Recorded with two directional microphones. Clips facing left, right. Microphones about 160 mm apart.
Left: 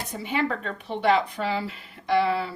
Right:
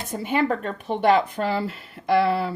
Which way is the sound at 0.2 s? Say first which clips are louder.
Right 4 dB; 50° right (ahead or behind).